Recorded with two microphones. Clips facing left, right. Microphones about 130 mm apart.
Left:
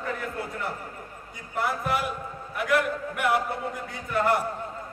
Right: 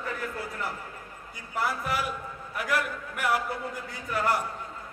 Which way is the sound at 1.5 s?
Centre (ahead or behind).